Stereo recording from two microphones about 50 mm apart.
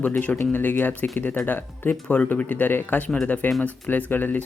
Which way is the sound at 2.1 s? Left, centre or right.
Left.